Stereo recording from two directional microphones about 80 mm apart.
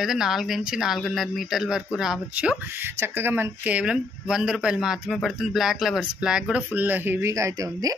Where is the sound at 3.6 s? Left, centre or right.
Centre.